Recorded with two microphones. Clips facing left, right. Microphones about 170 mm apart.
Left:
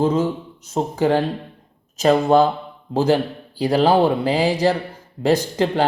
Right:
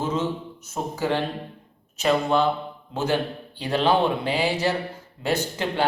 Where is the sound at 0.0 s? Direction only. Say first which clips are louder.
Left 7 dB; 35° left (ahead or behind).